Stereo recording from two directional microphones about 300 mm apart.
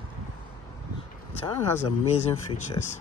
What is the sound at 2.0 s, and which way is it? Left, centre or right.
Speech, left.